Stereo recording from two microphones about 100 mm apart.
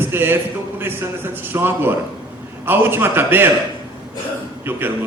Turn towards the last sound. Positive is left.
turn(degrees=-20)  # may be behind; listen again after turning